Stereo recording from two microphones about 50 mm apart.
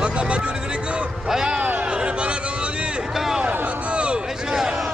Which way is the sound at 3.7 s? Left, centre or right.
Right.